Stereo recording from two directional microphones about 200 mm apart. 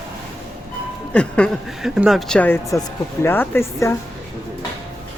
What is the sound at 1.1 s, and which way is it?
Speech, 5° left (ahead or behind).